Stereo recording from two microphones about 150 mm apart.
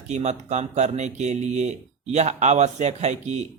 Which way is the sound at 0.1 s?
50° right (ahead or behind).